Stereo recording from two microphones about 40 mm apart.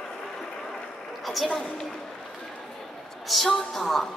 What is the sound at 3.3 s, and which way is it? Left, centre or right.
Speech, centre.